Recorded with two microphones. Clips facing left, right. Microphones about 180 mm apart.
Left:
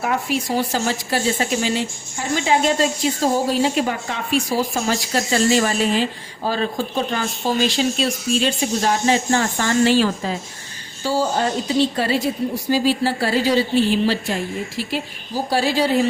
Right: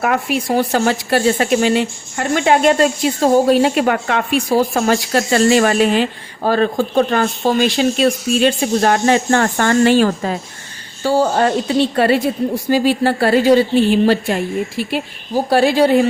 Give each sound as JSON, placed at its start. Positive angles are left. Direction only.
{"t": 0.0, "sound": "speech", "side_deg": -65}